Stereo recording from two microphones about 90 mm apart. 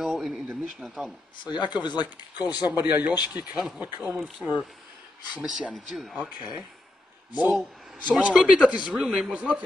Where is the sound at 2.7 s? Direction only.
20° right (ahead or behind).